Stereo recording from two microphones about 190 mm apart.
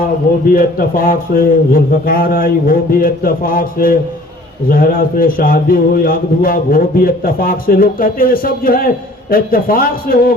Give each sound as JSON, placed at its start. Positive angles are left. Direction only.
{"t": 0.4, "sound": "a man's voice", "side_deg": 50}